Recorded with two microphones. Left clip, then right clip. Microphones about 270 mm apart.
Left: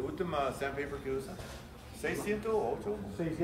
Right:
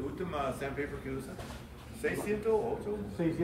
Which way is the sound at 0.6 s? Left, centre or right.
Left.